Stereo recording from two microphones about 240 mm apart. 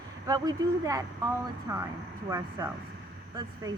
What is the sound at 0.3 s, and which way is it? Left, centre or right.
Speech, centre.